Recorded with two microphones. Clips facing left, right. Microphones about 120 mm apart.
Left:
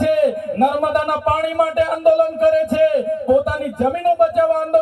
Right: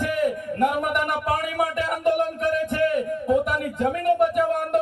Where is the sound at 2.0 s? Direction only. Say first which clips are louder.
Left 9 dB; 50° left (ahead or behind).